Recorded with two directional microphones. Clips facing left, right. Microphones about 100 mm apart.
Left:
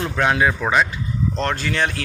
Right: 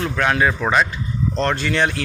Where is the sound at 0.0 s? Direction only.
15° left (ahead or behind).